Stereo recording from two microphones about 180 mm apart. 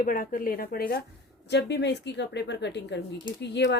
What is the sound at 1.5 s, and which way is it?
Speech, 70° left (ahead or behind).